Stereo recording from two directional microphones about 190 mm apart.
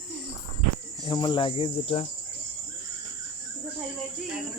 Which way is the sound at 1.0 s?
25° left (ahead or behind).